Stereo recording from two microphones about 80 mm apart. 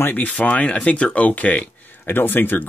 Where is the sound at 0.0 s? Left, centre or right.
Left.